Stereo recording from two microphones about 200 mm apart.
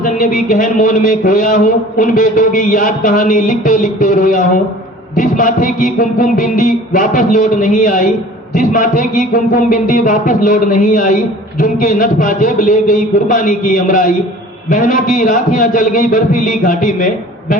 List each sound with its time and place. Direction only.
0.3 s a man's voice: 45° left (ahead or behind)